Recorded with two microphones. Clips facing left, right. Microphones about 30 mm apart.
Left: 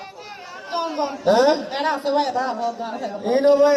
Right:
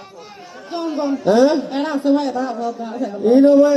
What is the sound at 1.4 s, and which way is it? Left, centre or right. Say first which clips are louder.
A man's voice: right 3 dB; centre.